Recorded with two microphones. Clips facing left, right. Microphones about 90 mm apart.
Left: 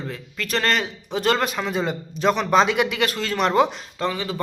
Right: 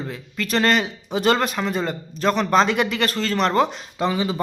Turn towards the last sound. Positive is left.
turn(degrees=-20)  # may be behind; listen again after turning